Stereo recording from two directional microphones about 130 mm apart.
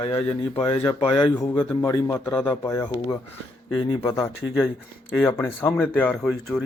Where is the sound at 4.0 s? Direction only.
20° left (ahead or behind); by 6.6 s 5° left (ahead or behind).